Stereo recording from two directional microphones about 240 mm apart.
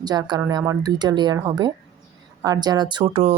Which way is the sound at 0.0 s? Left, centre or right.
Centre.